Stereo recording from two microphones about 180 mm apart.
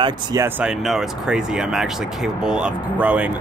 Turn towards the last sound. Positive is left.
turn(degrees=-5)  # may be behind; listen again after turning